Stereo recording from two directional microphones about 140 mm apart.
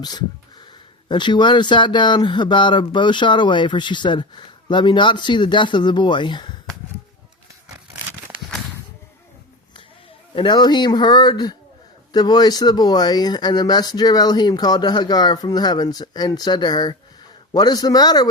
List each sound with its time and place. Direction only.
0.0 s speech: 30° left (ahead or behind)
10.3 s speech: 30° left (ahead or behind)